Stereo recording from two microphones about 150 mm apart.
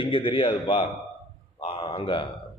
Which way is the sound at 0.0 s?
35° left (ahead or behind).